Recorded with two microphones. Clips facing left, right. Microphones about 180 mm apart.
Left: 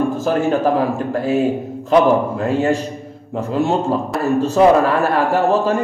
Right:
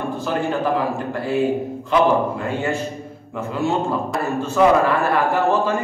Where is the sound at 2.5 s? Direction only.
35° left (ahead or behind).